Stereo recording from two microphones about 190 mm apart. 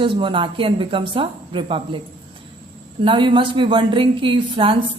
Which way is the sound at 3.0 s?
25° right (ahead or behind).